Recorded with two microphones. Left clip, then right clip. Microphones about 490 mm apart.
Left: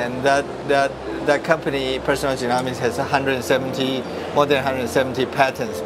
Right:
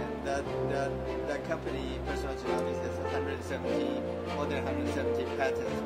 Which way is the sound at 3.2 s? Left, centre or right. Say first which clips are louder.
Left 14 dB; left.